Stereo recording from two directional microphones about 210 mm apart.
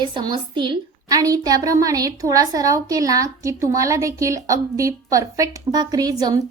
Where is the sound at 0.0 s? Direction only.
20° right (ahead or behind).